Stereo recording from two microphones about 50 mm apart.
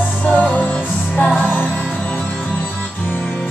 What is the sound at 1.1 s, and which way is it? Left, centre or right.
Music, left.